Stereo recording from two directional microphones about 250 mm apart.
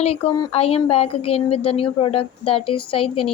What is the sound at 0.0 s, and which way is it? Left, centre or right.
Speech, left.